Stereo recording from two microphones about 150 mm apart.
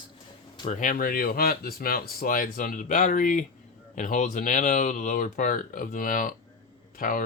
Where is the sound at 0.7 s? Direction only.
55° left (ahead or behind).